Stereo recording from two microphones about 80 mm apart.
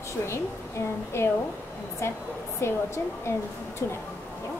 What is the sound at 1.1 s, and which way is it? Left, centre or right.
Speech, left.